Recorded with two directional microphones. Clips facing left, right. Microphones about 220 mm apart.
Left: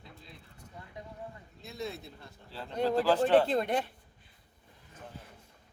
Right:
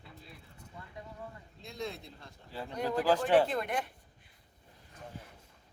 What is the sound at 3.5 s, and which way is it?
Speech, 30° left (ahead or behind).